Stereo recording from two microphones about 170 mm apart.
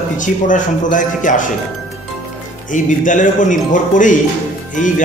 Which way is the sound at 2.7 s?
50° left (ahead or behind).